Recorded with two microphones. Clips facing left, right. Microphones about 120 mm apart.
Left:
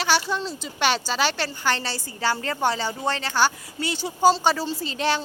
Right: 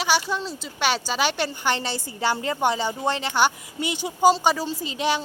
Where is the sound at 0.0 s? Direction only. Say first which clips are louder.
Even; 10° right (ahead or behind).